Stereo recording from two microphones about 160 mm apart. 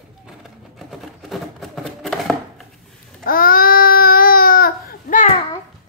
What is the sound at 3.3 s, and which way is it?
Baby cry, 65° left (ahead or behind).